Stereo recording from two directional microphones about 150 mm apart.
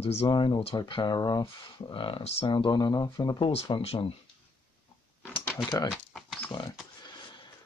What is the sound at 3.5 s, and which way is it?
Speech, 40° left (ahead or behind).